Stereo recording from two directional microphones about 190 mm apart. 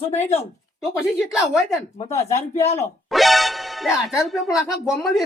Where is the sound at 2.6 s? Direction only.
35° left (ahead or behind).